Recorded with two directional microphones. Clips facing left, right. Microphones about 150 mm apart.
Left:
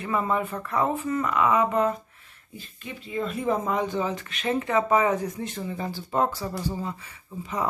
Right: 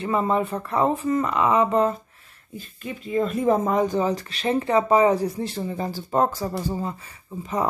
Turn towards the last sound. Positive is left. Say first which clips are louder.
# right 4 dB
turn(degrees=-40)  # may be behind; listen again after turning